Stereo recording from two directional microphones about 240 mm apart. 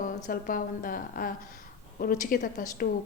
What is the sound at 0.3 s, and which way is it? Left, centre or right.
A woman's voice, left.